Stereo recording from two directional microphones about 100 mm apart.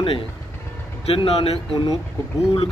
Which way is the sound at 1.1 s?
85° left.